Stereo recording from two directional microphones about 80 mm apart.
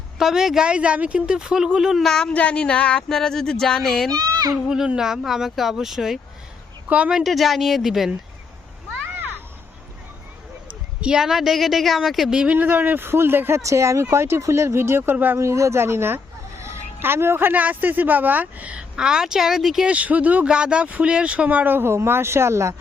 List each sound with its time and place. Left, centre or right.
0.2 s speech: centre
2.0 s speech: centre
4.1 s a child's voice: right
4.7 s speech: centre
6.8 s a woman's voice: centre
7.1 s speech: centre
11.0 s speech: centre
12.5 s speech: right
13.6 s speech: right
15.4 s speech: right; by 19.9 s centre
19.9 s speech: centre; by 22.7 s right